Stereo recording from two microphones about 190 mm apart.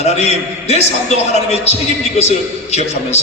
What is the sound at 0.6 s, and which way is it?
A man's voice, 35° left (ahead or behind).